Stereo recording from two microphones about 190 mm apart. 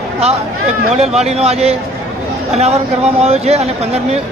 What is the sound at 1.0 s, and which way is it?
Speech, 35° right (ahead or behind).